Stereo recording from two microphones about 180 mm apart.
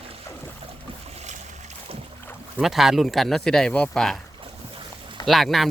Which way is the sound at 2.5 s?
Centre (ahead or behind).